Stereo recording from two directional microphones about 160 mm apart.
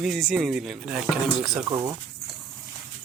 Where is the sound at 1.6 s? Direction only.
25° right (ahead or behind).